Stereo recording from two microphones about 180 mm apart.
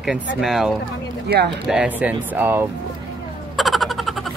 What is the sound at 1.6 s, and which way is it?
Speech, 5° right (ahead or behind).